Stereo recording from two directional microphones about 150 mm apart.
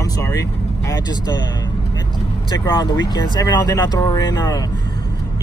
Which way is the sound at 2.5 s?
30° left (ahead or behind).